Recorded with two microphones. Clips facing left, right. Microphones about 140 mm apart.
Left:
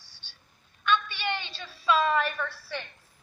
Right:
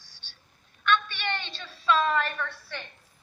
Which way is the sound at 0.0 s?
10° left (ahead or behind).